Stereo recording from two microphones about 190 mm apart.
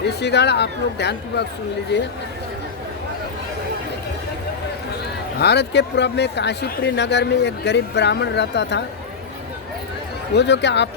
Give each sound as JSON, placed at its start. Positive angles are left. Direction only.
{"t": 0.0, "sound": "speech", "side_deg": 60}
{"t": 5.4, "sound": "speech", "side_deg": 60}
{"t": 10.3, "sound": "speech", "side_deg": 65}